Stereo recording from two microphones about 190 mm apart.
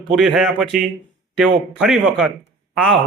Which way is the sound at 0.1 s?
5° right (ahead or behind).